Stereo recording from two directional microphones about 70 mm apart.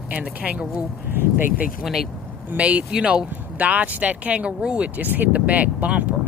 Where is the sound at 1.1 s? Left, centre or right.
Right.